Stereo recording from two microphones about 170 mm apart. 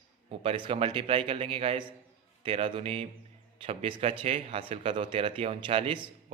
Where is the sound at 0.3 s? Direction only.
30° right (ahead or behind).